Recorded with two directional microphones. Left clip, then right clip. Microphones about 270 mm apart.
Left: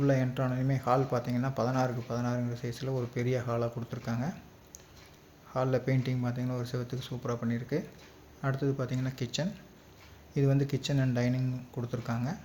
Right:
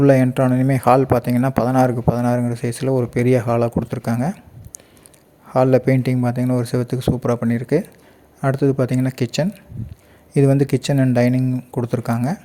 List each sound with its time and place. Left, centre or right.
0.0 s a man's voice: right